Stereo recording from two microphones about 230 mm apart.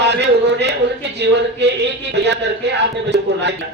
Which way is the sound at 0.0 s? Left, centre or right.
Right.